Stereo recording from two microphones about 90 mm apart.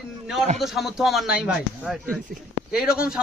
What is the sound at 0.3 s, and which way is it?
A man's voice, 5° right (ahead or behind).